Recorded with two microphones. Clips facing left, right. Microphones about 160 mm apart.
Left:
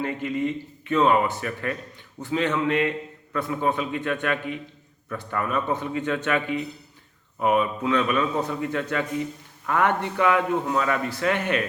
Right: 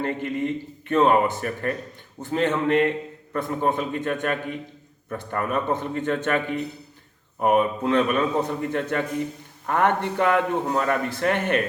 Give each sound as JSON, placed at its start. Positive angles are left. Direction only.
{"t": 0.0, "sound": "a man's voice", "side_deg": -50}